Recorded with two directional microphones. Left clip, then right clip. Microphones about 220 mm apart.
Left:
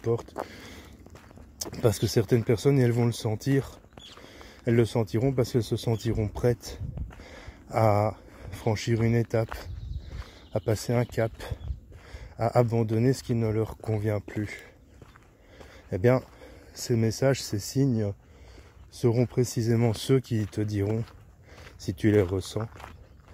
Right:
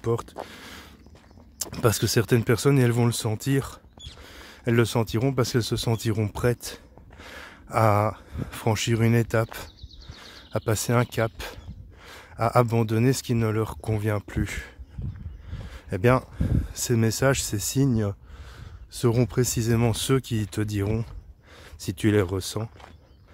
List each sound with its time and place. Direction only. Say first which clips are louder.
0.0 s speech: right 1 dB; 20° right (ahead or behind)
0.5 s a sound: right 3 dB; 15° right (ahead or behind)
1.6 s speech: right 2 dB; 20° right (ahead or behind)
7.2 s a sound: right 7 dB; 20° right (ahead or behind)
8.0 s speech: right 2 dB; 25° right (ahead or behind)
15.9 s speech: right 2 dB; 20° right (ahead or behind)